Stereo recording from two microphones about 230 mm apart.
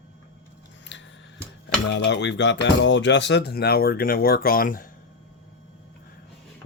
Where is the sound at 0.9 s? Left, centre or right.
Left.